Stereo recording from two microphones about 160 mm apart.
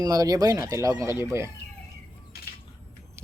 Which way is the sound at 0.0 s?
25° right (ahead or behind).